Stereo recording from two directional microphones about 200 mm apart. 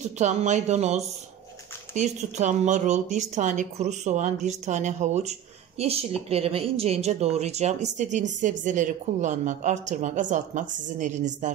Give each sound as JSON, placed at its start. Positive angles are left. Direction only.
{"t": 0.2, "sound": "a woman's voice", "side_deg": -35}